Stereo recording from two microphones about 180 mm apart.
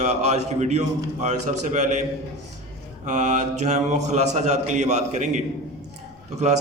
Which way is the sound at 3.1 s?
40° right (ahead or behind).